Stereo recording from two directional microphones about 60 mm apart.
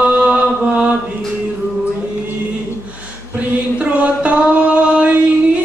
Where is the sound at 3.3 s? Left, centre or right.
Right.